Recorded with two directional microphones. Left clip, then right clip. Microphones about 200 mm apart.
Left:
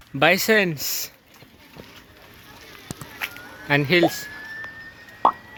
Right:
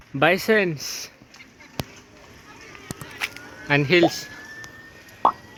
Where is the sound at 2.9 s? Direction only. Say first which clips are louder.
Right 1 dB; 5° left (ahead or behind).